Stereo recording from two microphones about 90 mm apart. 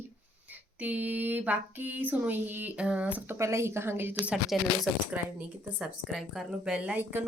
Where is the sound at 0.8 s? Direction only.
15° right (ahead or behind).